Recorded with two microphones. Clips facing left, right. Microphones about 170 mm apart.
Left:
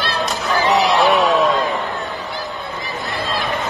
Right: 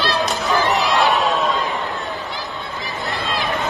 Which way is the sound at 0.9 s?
20° left (ahead or behind).